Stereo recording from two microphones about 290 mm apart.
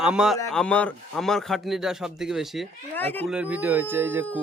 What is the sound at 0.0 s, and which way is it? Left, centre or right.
Speech, centre.